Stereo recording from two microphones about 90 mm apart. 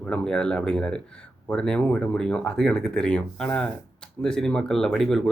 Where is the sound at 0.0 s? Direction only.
10° left (ahead or behind).